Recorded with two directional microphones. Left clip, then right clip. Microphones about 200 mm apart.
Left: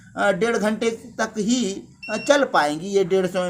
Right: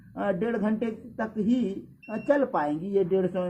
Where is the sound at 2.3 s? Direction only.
20° left (ahead or behind).